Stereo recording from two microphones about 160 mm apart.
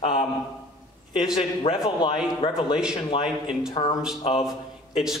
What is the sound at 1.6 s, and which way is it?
Speech, 35° left (ahead or behind).